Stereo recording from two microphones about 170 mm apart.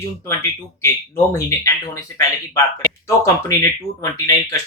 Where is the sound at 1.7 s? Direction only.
20° left (ahead or behind).